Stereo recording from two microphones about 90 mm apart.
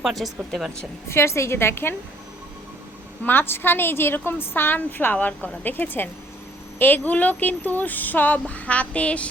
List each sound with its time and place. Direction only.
0.0 s speech: centre (ahead or behind)
1.0 s a woman's voice: 30° left (ahead or behind)
3.2 s a woman's voice: 25° left (ahead or behind)